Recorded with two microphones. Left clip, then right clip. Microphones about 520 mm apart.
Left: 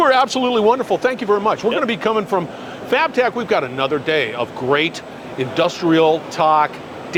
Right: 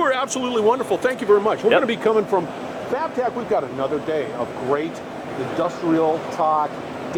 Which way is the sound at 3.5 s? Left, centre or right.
Left.